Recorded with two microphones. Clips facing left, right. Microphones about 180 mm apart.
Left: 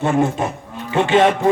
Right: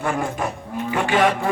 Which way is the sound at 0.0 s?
25° left (ahead or behind).